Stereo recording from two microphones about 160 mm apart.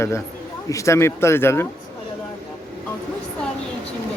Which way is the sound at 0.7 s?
20° left (ahead or behind).